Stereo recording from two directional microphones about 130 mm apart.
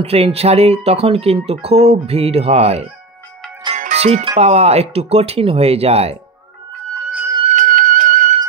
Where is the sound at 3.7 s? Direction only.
60° right (ahead or behind).